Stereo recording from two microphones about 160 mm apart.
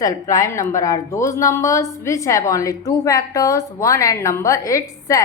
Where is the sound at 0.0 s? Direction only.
20° left (ahead or behind).